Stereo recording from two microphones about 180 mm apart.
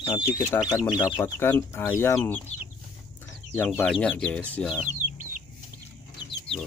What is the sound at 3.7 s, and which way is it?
Speech, 10° left (ahead or behind).